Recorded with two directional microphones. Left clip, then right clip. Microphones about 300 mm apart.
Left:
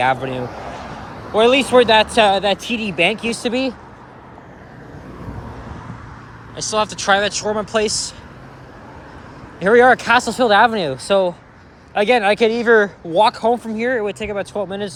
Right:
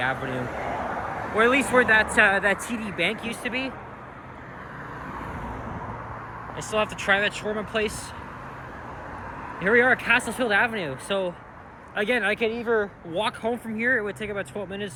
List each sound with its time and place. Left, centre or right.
0.0 s speech: centre
0.5 s a sound: right
1.4 s speech: centre
6.7 s speech: centre
9.6 s speech: centre
12.6 s speech: left